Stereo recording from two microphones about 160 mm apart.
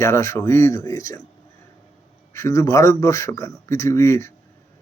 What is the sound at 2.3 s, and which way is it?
A man's voice, 20° left (ahead or behind).